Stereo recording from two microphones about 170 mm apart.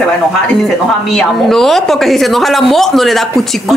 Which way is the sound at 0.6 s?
Centre (ahead or behind).